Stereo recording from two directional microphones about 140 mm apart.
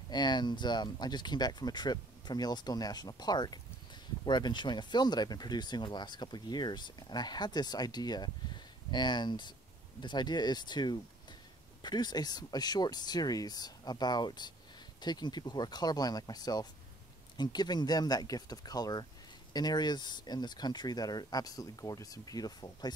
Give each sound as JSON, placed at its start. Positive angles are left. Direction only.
{"t": 0.1, "sound": "speech", "side_deg": 30}